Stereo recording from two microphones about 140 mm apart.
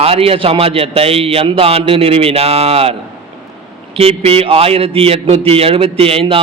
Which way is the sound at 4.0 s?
45° right (ahead or behind).